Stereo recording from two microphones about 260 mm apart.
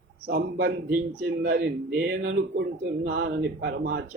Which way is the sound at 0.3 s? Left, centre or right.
Right.